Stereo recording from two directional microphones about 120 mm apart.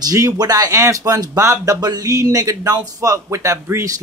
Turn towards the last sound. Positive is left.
turn(degrees=-25)  # may be behind; listen again after turning